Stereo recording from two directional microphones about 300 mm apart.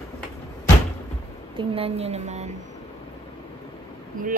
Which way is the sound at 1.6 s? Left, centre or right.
Centre.